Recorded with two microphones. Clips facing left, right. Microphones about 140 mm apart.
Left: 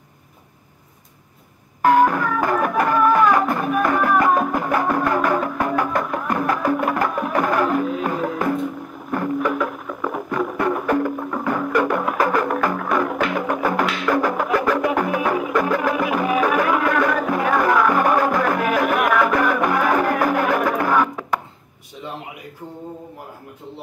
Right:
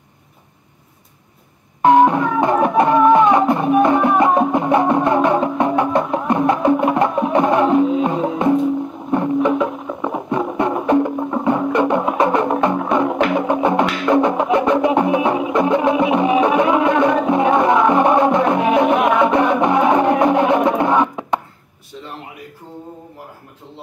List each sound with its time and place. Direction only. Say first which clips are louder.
1.8 s music: right 4 dB; 25° right (ahead or behind)